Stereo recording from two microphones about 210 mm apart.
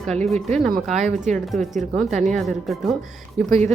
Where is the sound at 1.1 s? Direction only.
35° right (ahead or behind).